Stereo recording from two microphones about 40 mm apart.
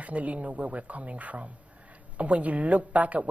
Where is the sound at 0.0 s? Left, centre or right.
Right.